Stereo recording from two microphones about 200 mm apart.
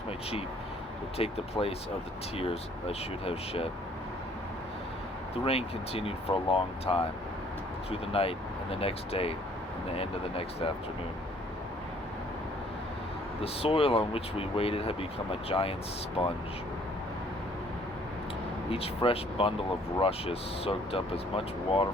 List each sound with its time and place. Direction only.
1.2 s speech: 30° left (ahead or behind)
5.5 s speech: 30° left (ahead or behind)
13.4 s speech: 30° left (ahead or behind)
18.7 s speech: 30° left (ahead or behind)